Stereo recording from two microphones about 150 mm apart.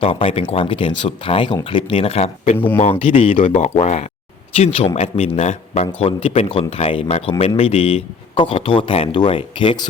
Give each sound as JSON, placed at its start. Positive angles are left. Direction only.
{"t": 0.0, "sound": "speech", "side_deg": 40}
{"t": 3.5, "sound": "a man's voice", "side_deg": 50}